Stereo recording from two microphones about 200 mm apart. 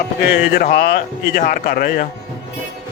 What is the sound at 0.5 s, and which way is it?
Speech, 45° left (ahead or behind).